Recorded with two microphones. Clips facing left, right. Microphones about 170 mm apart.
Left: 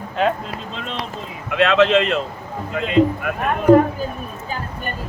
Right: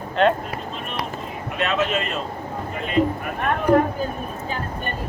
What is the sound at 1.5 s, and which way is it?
Speech, 90° left.